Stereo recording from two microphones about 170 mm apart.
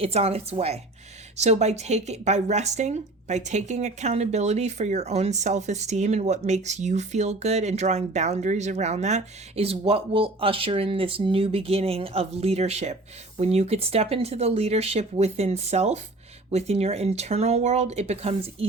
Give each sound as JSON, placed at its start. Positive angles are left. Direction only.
{"t": 0.0, "sound": "speech", "side_deg": -35}